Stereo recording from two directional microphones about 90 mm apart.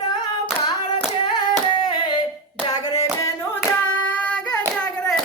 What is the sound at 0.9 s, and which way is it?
Hands, 55° left (ahead or behind).